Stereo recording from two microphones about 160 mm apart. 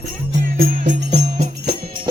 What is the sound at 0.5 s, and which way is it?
Music, 60° right (ahead or behind).